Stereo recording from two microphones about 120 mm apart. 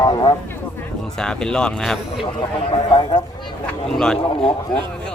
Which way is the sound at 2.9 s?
35° left (ahead or behind).